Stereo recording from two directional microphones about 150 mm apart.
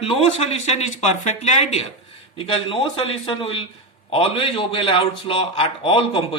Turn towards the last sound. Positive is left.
turn(degrees=35)  # may be behind; listen again after turning